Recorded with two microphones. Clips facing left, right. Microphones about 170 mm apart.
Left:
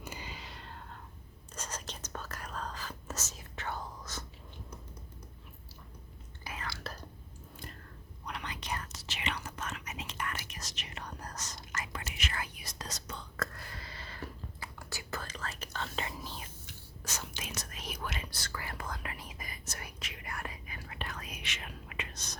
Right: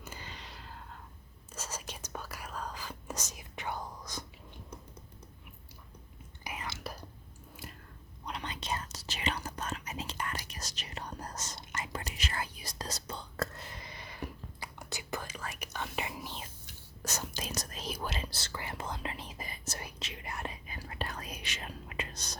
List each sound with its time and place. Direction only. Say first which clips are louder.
0.0 s whispering: left 2 dB; 10° left (ahead or behind); by 4.3 s 15° right (ahead or behind)
6.4 s whispering: right 1 dB; 15° right (ahead or behind)
8.3 s whispering: right 2 dB; 25° right (ahead or behind)
17.0 s whispering: right 4 dB; 40° right (ahead or behind)